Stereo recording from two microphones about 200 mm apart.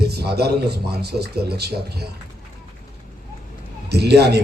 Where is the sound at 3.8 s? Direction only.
55° right (ahead or behind).